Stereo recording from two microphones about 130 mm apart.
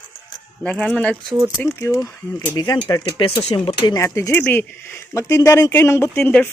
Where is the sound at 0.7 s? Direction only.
10° left (ahead or behind).